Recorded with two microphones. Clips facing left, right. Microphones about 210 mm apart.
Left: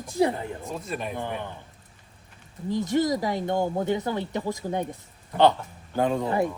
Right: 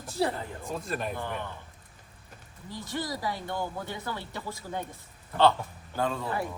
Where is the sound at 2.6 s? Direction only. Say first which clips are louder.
Left 11 dB; 20° left (ahead or behind).